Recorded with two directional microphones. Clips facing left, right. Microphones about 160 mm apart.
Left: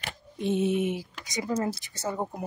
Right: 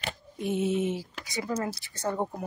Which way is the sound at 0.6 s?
15° left (ahead or behind).